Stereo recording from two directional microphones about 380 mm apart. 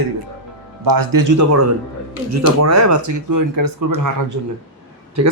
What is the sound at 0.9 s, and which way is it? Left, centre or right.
A man's voice, right.